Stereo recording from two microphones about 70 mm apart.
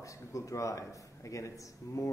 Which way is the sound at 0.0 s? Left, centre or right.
Left.